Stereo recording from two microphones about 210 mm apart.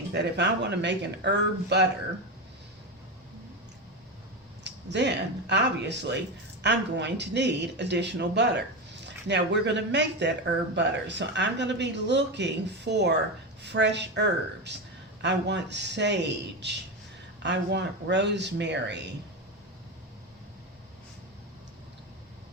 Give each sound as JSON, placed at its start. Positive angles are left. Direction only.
{"t": 0.1, "sound": "speech", "side_deg": -55}
{"t": 4.6, "sound": "speech", "side_deg": -55}